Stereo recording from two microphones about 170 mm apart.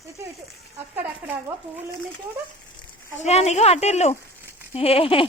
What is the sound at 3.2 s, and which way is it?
Speech, 40° left (ahead or behind).